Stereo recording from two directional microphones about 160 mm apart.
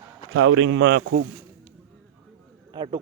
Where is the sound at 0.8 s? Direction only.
90° right.